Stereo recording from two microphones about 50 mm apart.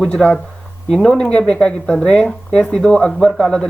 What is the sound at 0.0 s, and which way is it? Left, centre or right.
Speech, centre.